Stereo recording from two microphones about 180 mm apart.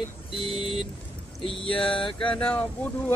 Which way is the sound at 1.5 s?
30° left (ahead or behind).